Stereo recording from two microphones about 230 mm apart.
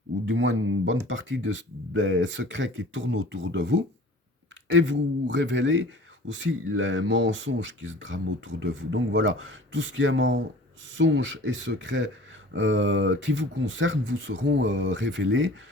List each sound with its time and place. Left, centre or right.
0.3 s speech: right